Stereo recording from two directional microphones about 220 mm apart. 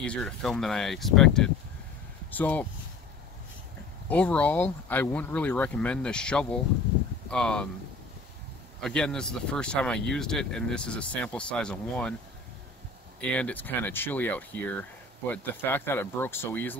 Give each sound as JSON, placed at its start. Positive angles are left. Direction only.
{"t": 0.0, "sound": "speech", "side_deg": 5}
{"t": 4.1, "sound": "speech", "side_deg": 5}
{"t": 8.8, "sound": "speech", "side_deg": 5}
{"t": 13.2, "sound": "speech", "side_deg": 5}